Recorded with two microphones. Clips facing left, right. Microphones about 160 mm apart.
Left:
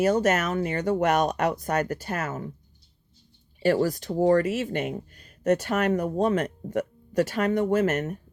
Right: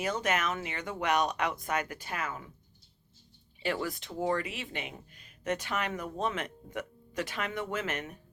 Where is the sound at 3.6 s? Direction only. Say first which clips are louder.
Left 11 dB; 40° left (ahead or behind).